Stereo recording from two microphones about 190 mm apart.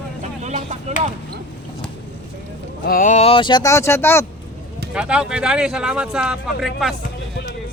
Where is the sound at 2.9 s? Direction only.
45° left (ahead or behind); by 4.2 s 15° left (ahead or behind).